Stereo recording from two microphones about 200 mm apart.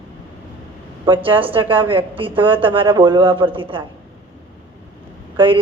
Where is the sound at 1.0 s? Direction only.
25° right (ahead or behind).